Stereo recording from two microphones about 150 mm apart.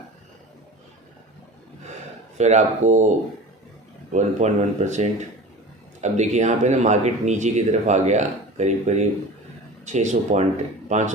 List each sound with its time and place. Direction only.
2.4 s speech: 50° right (ahead or behind)
4.1 s speech: 50° right (ahead or behind)